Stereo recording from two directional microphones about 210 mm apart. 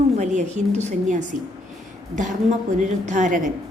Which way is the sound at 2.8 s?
35° right (ahead or behind).